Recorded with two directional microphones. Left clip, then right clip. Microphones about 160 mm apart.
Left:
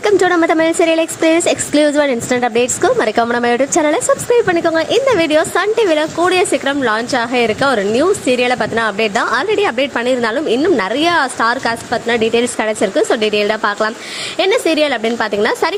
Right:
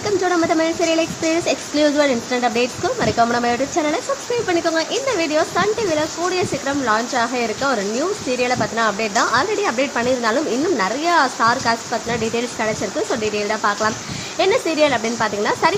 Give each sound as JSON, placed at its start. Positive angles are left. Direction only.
{"t": 0.0, "sound": "speech", "side_deg": 45}